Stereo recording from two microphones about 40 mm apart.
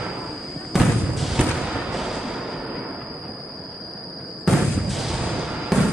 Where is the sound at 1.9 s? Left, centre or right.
Centre.